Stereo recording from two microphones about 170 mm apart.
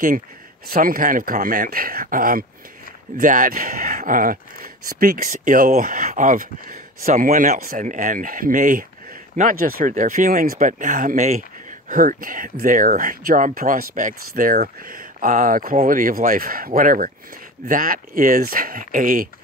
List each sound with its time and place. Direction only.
0.7 s speech: 55° right (ahead or behind)